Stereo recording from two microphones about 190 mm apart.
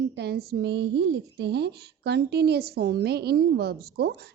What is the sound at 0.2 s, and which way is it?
A woman's voice, 60° right (ahead or behind).